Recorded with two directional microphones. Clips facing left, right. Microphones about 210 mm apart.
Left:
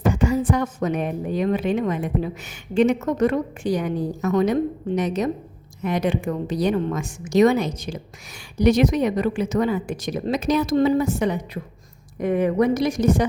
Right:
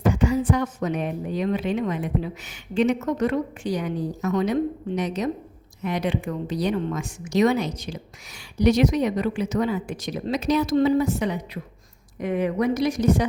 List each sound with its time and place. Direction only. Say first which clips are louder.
0.0 s speech: left 1 dB; 45° left (ahead or behind)